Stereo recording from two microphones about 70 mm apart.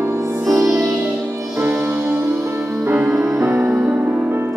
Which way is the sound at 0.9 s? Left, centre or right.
Centre.